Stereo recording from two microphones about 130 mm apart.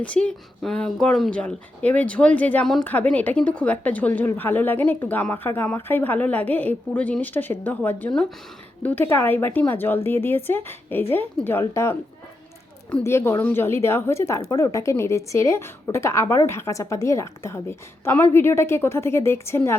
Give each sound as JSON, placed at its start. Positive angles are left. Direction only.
{"t": 0.0, "sound": "speech", "side_deg": 10}
{"t": 13.1, "sound": "speech", "side_deg": 20}